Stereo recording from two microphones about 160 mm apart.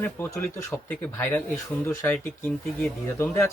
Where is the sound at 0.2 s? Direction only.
10° left (ahead or behind).